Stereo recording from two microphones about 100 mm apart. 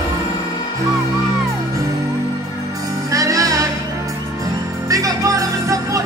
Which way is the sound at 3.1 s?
35° right (ahead or behind).